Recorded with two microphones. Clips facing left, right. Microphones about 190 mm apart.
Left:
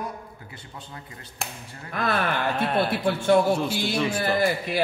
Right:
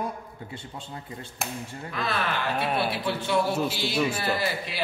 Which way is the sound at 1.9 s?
50° left (ahead or behind).